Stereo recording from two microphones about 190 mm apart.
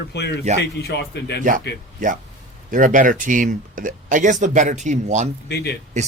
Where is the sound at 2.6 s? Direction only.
45° right (ahead or behind).